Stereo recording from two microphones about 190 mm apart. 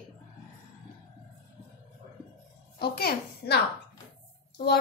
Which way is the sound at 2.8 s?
55° left (ahead or behind).